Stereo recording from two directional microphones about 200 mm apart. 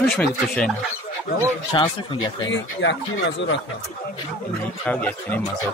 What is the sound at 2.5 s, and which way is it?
Speech, 65° left (ahead or behind).